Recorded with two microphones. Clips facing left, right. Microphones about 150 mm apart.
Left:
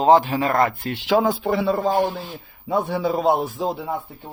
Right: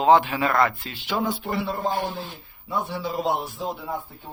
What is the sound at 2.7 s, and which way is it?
A man's voice, 50° left (ahead or behind).